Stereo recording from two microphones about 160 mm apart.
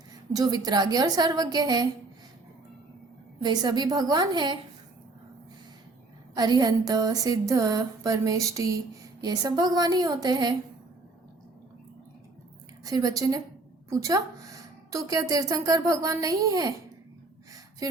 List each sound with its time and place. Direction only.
0.3 s a woman's voice: 25° right (ahead or behind)
3.4 s a woman's voice: 25° right (ahead or behind)
6.3 s a woman's voice: 25° right (ahead or behind)
12.8 s a woman's voice: 25° right (ahead or behind)